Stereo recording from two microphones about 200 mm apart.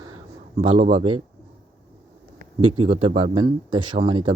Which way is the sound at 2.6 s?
30° right (ahead or behind).